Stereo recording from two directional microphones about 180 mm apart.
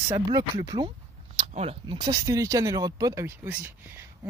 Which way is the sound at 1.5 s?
30° right (ahead or behind).